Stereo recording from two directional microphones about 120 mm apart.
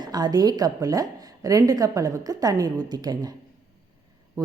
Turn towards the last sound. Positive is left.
turn(degrees=-30)  # may be behind; listen again after turning